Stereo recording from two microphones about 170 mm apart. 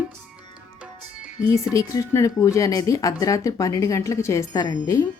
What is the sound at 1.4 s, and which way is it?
A woman's voice, 20° left (ahead or behind).